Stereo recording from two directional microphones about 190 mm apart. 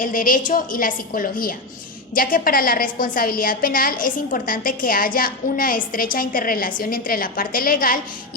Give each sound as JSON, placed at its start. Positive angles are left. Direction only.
{"t": 0.0, "sound": "a woman's voice", "side_deg": 45}